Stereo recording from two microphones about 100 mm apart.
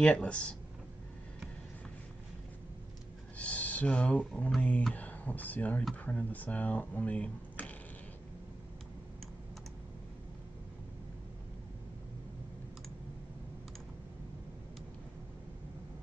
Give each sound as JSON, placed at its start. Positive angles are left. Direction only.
{"t": 0.0, "sound": "speech", "side_deg": 10}
{"t": 3.3, "sound": "speech", "side_deg": 15}